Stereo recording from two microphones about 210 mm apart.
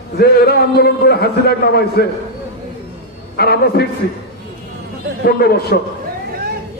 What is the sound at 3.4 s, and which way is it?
Speech, 50° left (ahead or behind).